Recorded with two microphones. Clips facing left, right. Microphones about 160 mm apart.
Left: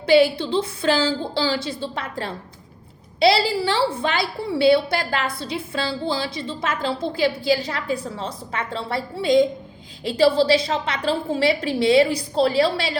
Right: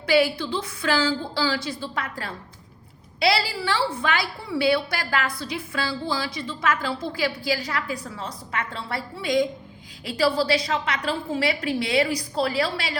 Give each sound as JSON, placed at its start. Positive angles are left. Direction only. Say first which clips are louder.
{"t": 0.0, "sound": "a woman's voice", "louder": "left 5 dB", "side_deg": 25}